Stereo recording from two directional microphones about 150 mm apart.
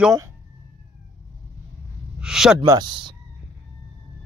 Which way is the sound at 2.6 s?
25° right (ahead or behind).